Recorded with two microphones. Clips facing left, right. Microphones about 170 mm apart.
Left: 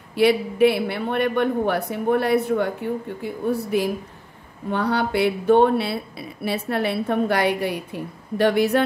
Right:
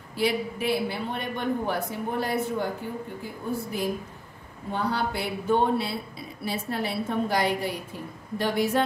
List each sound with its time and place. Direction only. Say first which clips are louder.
0.1 s speech: left 8 dB; 65° left (ahead or behind)